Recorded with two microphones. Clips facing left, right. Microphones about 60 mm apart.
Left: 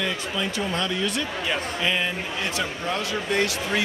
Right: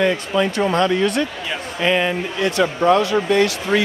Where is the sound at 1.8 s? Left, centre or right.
Right.